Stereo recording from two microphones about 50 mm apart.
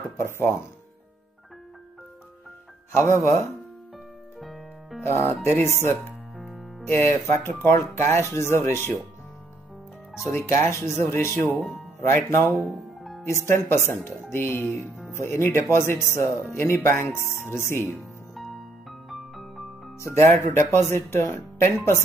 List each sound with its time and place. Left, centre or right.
0.2 s speech: left
2.9 s speech: left
4.4 s music: centre
5.0 s speech: left
6.3 s music: centre
6.9 s speech: left
10.4 s speech: left
12.6 s music: centre
13.3 s speech: left
15.1 s speech: left
18.3 s music: centre
20.2 s speech: left